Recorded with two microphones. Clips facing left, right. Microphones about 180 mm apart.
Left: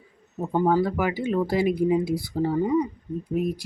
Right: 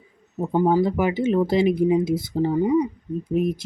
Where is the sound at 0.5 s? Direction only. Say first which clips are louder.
Right 2 dB; 15° right (ahead or behind).